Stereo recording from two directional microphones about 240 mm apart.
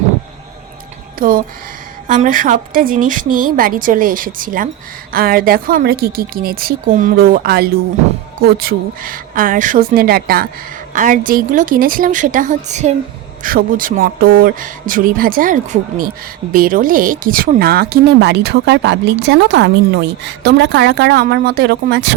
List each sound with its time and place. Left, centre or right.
1.2 s a woman's voice: right